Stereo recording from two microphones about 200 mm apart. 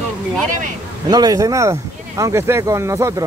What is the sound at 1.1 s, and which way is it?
Speech, 20° right (ahead or behind).